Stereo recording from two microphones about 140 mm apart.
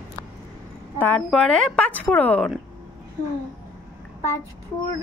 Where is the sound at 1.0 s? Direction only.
5° left (ahead or behind).